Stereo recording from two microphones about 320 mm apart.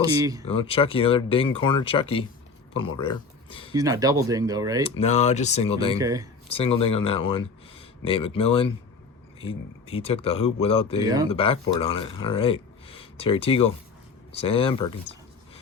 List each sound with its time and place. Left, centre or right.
0.0 s speech: centre
0.4 s speech: centre
3.8 s speech: centre
4.9 s speech: centre
6.0 s speech: centre
6.5 s speech: centre
11.0 s speech: centre
11.3 s speech: centre